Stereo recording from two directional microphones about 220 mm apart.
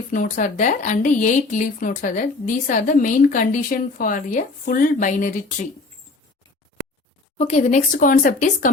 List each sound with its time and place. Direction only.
0.1 s a woman's voice: 40° left (ahead or behind)
7.3 s a woman's voice: 30° left (ahead or behind)